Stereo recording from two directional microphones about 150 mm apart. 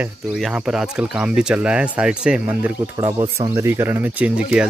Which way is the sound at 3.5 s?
15° right (ahead or behind).